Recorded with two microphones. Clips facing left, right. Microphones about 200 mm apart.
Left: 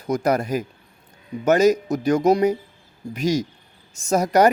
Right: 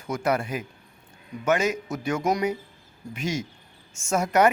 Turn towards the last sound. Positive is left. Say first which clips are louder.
# left 4 dB
turn(degrees=35)  # may be behind; listen again after turning